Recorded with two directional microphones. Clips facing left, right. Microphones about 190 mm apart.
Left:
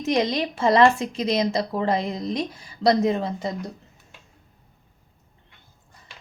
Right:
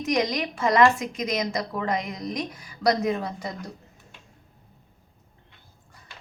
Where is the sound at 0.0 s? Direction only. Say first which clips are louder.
Left 2 dB; 25° left (ahead or behind).